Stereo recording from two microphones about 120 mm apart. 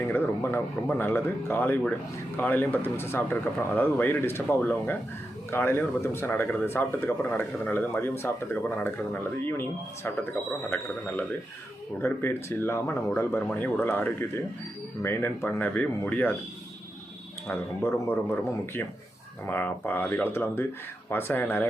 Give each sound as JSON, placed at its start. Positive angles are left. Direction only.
{"t": 0.0, "sound": "speech", "side_deg": 20}
{"t": 11.9, "sound": "speech", "side_deg": 20}
{"t": 17.5, "sound": "speech", "side_deg": 20}